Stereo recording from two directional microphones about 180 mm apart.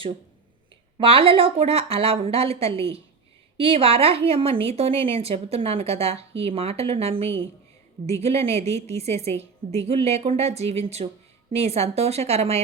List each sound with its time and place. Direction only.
0.9 s a woman's voice: 30° right (ahead or behind)